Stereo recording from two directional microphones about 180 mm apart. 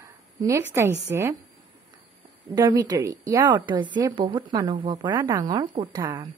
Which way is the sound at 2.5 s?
20° right (ahead or behind).